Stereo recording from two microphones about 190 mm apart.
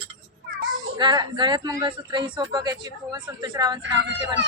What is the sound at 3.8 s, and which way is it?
Speech, 70° right (ahead or behind).